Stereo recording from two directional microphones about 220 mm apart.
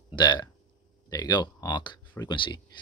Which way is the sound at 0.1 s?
20° left (ahead or behind).